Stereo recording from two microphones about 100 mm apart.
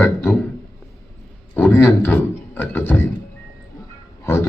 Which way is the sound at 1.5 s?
20° left (ahead or behind).